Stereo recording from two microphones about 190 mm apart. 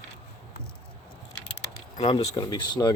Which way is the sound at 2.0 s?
30° left (ahead or behind).